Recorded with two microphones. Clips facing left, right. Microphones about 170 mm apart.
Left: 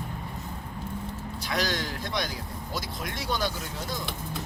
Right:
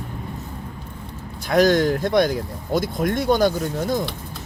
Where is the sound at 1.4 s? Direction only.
50° right (ahead or behind).